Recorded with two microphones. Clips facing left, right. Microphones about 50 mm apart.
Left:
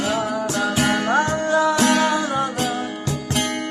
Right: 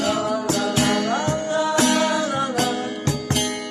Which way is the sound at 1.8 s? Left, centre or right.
Left.